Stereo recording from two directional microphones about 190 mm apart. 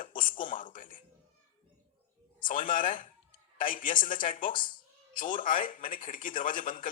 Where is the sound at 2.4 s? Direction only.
45° left (ahead or behind).